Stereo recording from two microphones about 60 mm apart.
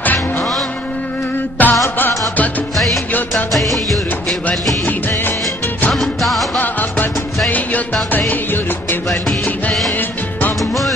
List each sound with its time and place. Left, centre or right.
1.6 s music: left
3.5 s music of bollywood: centre
5.9 s music: centre
6.6 s music: left
10.6 s music: centre